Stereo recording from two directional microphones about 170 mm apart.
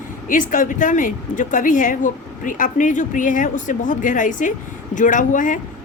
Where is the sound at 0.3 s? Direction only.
50° left (ahead or behind).